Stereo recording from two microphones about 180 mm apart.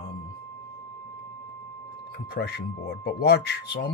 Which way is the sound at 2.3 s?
65° left (ahead or behind).